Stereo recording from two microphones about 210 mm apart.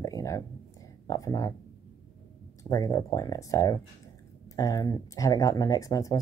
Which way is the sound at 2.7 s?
15° left (ahead or behind).